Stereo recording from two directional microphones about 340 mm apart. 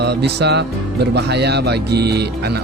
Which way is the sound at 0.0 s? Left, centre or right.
Right.